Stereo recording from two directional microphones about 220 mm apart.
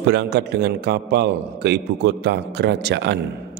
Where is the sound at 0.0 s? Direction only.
50° right (ahead or behind).